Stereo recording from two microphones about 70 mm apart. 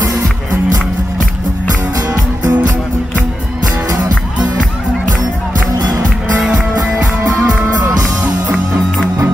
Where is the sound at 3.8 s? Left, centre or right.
Right.